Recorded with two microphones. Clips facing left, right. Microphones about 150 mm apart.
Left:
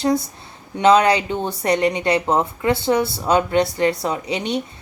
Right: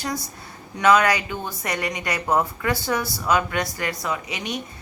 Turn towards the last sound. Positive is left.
turn(degrees=30)  # may be behind; listen again after turning